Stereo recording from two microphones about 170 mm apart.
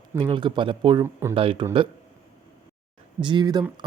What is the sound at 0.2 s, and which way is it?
Speech, 30° right (ahead or behind).